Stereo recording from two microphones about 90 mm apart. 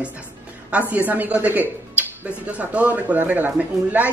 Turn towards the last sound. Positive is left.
turn(degrees=-15)  # may be behind; listen again after turning